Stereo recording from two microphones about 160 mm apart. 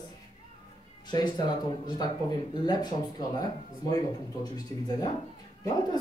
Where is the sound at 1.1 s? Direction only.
25° left (ahead or behind).